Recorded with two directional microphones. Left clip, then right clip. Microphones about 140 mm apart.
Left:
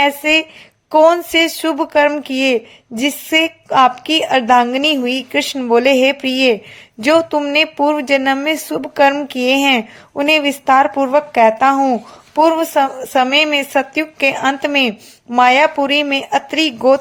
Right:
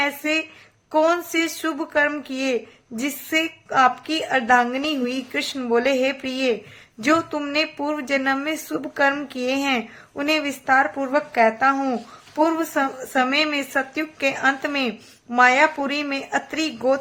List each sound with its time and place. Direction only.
0.0 s a woman's voice: 40° left (ahead or behind)